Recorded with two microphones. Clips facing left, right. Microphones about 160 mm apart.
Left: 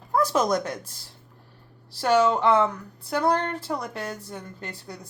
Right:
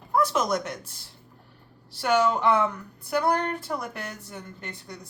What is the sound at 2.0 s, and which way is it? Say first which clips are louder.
A woman's voice: left 2 dB; 30° left (ahead or behind).